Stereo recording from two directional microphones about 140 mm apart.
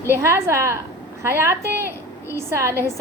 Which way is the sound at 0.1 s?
20° right (ahead or behind).